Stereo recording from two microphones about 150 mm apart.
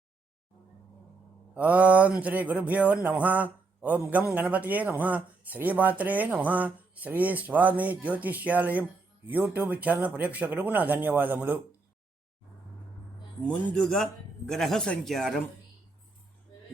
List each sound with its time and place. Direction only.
1.5 s speech: 10° right (ahead or behind)
13.4 s speech: 10° left (ahead or behind)